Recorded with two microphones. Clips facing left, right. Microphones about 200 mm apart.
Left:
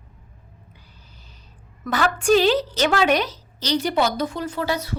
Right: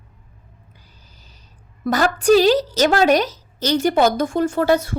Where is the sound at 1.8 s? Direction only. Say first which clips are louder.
Right 4 dB; 40° right (ahead or behind).